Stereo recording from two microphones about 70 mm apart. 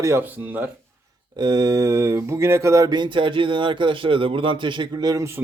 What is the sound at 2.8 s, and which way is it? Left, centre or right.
Speech, right.